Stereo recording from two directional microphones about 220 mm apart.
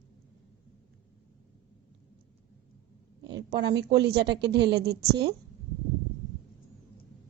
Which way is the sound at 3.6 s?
50° right (ahead or behind).